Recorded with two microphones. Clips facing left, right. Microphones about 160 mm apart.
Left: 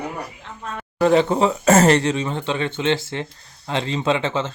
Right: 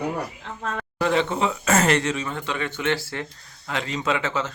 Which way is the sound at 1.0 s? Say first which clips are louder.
Left 6 dB; 35° left (ahead or behind).